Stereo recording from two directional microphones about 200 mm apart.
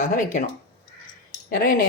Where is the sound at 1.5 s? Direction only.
45° left (ahead or behind).